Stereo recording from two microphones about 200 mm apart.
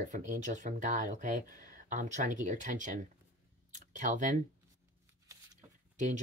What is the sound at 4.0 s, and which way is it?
Speech, 40° right (ahead or behind).